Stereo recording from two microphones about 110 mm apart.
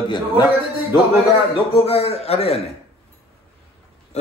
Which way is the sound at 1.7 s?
65° left (ahead or behind).